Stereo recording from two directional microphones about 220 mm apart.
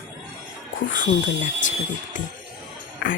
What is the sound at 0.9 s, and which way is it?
Speech, 55° left (ahead or behind).